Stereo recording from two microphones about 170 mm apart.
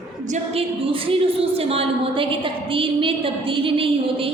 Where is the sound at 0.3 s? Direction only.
35° right (ahead or behind).